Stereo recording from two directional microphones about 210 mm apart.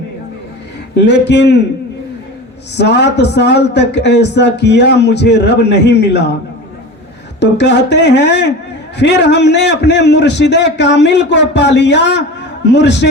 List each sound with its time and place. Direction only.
0.9 s a man's voice: 55° left (ahead or behind)
2.7 s a man's voice: 55° left (ahead or behind)
7.3 s a man's voice: 55° left (ahead or behind)